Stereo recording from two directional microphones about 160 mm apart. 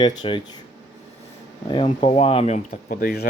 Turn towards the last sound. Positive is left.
turn(degrees=75)  # may be behind; listen again after turning